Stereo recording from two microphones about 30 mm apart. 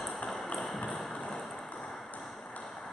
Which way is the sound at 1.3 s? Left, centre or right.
Centre.